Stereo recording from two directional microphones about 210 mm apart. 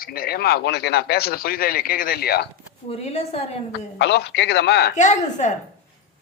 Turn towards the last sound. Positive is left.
turn(degrees=35)  # may be behind; listen again after turning